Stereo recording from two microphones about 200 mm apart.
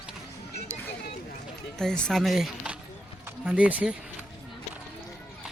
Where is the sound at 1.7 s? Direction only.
5° left (ahead or behind).